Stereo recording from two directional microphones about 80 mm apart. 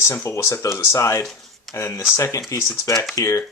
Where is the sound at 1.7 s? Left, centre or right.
Left.